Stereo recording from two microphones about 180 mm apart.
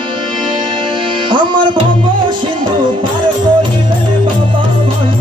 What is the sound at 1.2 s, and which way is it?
Tabla, 25° right (ahead or behind).